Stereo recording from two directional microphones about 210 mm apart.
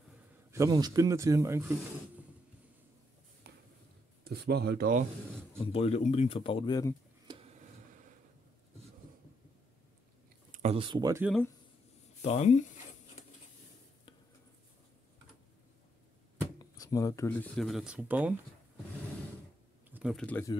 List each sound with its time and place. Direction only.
0.5 s speech: 15° right (ahead or behind)
3.4 s a sound: 45° right (ahead or behind)
4.2 s speech: 50° right (ahead or behind)
5.6 s speech: 30° left (ahead or behind)
7.3 s a sound: 20° right (ahead or behind)
10.5 s speech: 30° right (ahead or behind)
12.2 s speech: 30° left (ahead or behind)
16.5 s speech: 15° left (ahead or behind); by 18.3 s 10° right (ahead or behind)
19.9 s speech: 5° right (ahead or behind)